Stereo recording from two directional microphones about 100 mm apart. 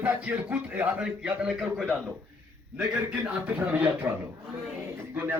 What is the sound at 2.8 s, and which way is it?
A man's voice, 15° right (ahead or behind).